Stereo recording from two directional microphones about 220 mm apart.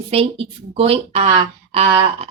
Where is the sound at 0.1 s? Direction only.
25° right (ahead or behind).